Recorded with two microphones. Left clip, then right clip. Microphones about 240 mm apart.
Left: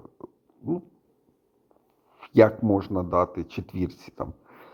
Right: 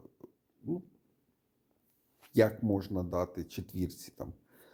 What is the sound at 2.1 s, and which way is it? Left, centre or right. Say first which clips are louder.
Speech: left 10 dB; centre.